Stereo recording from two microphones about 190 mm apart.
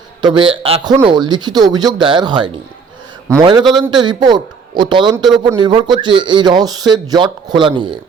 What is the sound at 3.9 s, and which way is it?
A man's voice, 25° right (ahead or behind).